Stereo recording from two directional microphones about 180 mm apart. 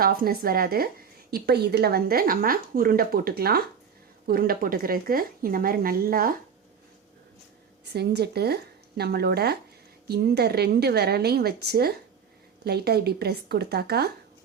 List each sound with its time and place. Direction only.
0.0 s speech: 55° right (ahead or behind)
7.9 s speech: 65° right (ahead or behind)